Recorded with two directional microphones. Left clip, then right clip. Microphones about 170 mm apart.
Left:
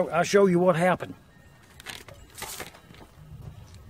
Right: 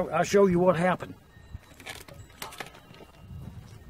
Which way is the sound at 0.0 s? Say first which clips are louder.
Left 2 dB; 35° left (ahead or behind).